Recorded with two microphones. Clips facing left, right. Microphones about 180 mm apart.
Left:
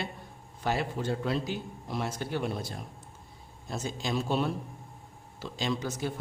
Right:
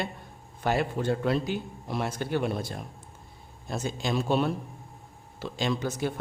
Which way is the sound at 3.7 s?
60° right (ahead or behind).